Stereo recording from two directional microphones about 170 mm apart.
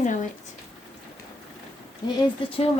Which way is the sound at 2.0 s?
25° left (ahead or behind).